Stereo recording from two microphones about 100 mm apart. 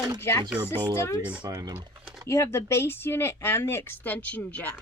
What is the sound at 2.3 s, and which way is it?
Speech, 25° left (ahead or behind).